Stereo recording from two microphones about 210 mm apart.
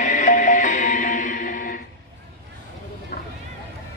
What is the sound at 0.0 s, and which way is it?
Music, 35° left (ahead or behind).